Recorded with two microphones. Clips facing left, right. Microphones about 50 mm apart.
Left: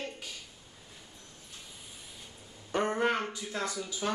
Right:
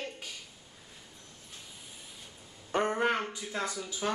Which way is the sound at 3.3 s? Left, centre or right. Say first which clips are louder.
Even; centre.